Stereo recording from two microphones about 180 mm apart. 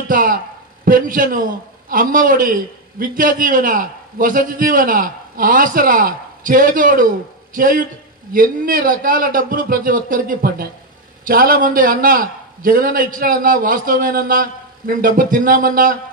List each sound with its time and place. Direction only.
0.1 s a man's voice: 50° right (ahead or behind)